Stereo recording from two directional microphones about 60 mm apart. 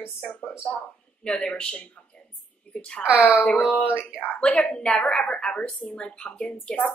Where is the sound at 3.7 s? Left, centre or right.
Left.